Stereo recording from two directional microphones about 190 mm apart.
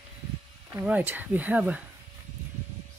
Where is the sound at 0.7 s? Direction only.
10° right (ahead or behind).